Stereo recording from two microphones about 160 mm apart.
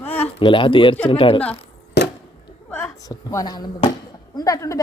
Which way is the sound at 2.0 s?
90° left.